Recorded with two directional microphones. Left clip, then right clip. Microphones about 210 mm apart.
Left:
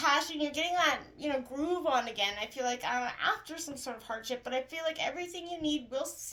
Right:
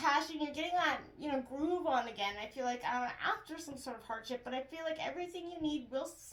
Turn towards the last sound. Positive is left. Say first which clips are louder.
# left 4 dB
turn(degrees=35)  # may be behind; listen again after turning